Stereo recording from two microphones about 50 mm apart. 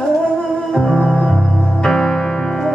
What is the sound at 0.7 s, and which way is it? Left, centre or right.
Music, centre.